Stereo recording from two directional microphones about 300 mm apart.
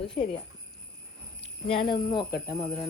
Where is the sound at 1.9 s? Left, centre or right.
Centre.